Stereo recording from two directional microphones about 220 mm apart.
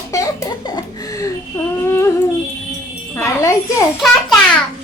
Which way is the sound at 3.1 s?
15° left (ahead or behind).